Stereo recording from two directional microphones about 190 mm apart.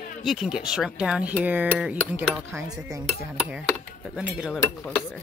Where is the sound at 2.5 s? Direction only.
15° right (ahead or behind).